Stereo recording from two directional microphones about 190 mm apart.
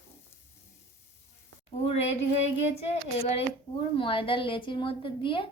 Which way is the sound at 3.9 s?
30° left (ahead or behind).